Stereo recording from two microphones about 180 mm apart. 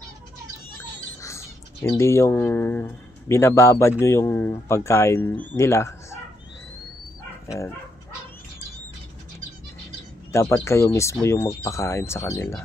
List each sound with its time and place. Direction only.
1.2 s speech: 15° left (ahead or behind)
10.3 s speech: 15° left (ahead or behind)